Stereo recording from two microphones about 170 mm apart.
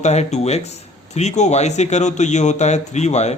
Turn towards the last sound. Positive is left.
turn(degrees=40)  # may be behind; listen again after turning